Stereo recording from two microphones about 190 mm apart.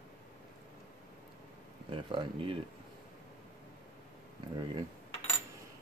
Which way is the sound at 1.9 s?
25° right (ahead or behind).